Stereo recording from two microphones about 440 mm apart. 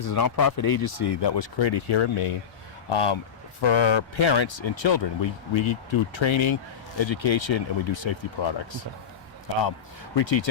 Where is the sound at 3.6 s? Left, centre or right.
Left.